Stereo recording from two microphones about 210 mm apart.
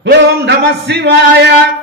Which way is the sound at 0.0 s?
55° right (ahead or behind).